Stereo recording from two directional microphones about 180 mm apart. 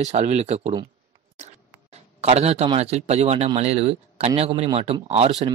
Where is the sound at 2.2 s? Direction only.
35° right (ahead or behind).